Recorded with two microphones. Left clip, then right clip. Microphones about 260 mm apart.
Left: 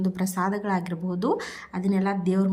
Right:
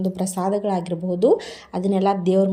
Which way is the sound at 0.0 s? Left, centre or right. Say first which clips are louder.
Right 3 dB; centre.